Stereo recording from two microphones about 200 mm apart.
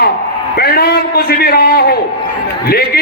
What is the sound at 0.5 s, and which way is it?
A man's voice, 50° left (ahead or behind).